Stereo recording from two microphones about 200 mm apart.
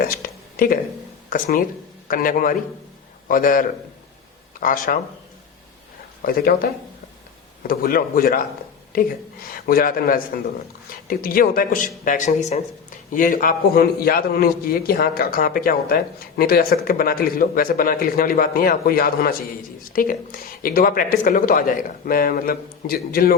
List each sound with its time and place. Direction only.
0.0 s a sound: 45° left (ahead or behind)
1.3 s a man's voice: 45° left (ahead or behind)
6.2 s a man's voice: 50° left (ahead or behind)